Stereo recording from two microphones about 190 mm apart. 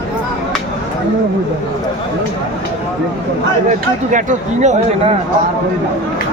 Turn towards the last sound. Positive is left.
turn(degrees=-35)  # may be behind; listen again after turning